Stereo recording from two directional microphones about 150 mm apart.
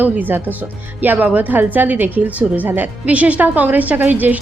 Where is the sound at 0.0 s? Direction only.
10° right (ahead or behind).